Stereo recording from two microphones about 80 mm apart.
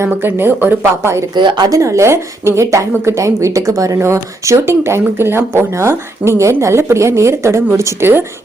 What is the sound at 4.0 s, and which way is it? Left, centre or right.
A woman's voice, right.